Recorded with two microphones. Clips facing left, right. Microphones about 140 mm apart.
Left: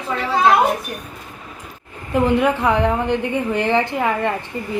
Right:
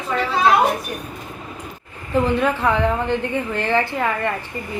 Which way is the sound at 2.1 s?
15° left (ahead or behind).